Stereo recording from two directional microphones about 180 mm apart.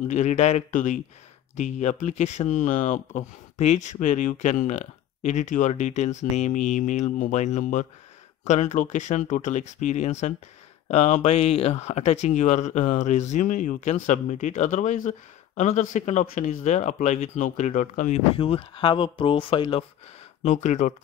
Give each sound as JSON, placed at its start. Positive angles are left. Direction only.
{"t": 0.1, "sound": "speech", "side_deg": 40}
{"t": 18.3, "sound": "speech", "side_deg": 30}
{"t": 20.4, "sound": "speech", "side_deg": 40}